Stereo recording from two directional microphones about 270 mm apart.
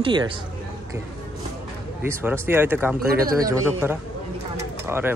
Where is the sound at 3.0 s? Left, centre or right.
Right.